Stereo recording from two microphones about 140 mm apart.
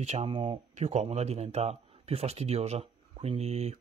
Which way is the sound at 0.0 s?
50° right (ahead or behind).